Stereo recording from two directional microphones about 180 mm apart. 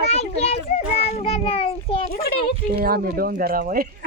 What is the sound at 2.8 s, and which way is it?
Speech, 55° right (ahead or behind).